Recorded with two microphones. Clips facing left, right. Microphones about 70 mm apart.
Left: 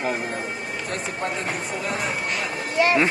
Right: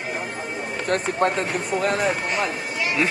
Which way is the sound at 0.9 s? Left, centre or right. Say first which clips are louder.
Right 9 dB; right.